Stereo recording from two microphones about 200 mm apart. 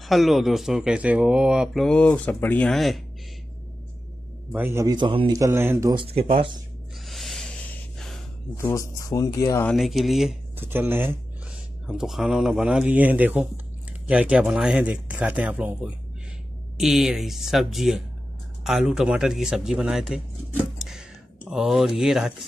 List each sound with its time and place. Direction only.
0.0 s speech: centre (ahead or behind)
4.5 s speech: 10° right (ahead or behind)
6.0 s speech: 30° right (ahead or behind)
7.1 s a sound: centre (ahead or behind)
8.5 s speech: 15° left (ahead or behind)
9.8 s speech: centre (ahead or behind)
21.5 s speech: centre (ahead or behind)